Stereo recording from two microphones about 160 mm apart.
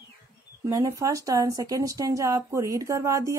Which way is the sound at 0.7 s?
20° right (ahead or behind).